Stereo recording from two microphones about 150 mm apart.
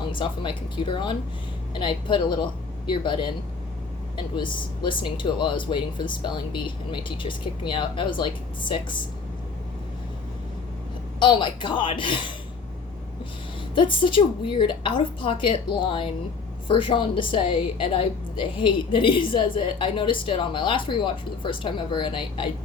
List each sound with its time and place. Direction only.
0.1 s speech: 35° left (ahead or behind)
4.4 s speech: 30° left (ahead or behind)
11.2 s speech: 30° left (ahead or behind)
13.7 s speech: 35° left (ahead or behind)